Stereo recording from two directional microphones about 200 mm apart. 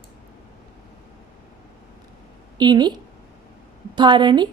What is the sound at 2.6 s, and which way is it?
Speech, 20° right (ahead or behind).